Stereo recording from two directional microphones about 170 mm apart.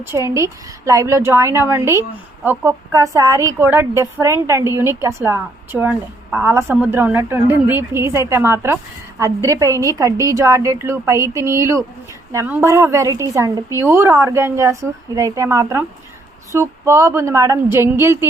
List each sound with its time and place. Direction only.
0.0 s a woman's voice: 15° right (ahead or behind)